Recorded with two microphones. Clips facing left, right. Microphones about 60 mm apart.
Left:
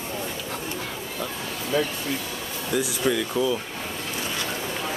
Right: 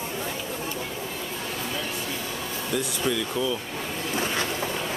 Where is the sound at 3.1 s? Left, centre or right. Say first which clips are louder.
Left 3 dB; centre.